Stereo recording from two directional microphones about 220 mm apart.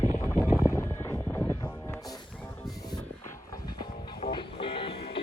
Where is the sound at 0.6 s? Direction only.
10° left (ahead or behind).